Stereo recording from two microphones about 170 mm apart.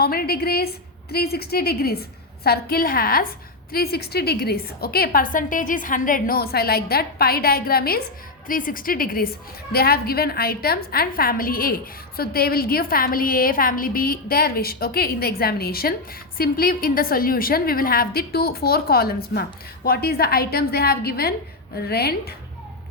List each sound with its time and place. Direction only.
0.0 s a woman's voice: 65° left (ahead or behind)